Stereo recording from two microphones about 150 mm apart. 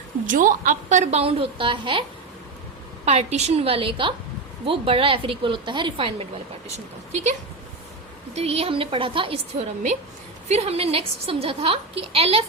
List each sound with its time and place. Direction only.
0.3 s a woman's voice: 60° right (ahead or behind); by 2.0 s 35° right (ahead or behind)
3.1 s a woman's voice: 45° right (ahead or behind)
8.4 s a woman's voice: 40° right (ahead or behind)